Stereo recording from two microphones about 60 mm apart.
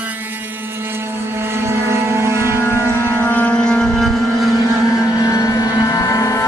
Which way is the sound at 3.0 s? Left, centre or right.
Left.